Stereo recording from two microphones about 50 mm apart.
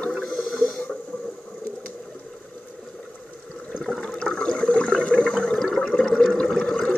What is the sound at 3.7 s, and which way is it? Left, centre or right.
Water, centre.